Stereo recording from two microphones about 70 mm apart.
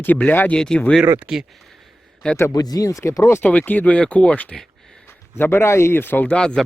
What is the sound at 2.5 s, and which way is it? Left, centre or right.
Speech, left.